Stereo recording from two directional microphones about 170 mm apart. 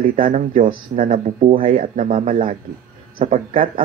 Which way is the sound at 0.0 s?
50° right (ahead or behind).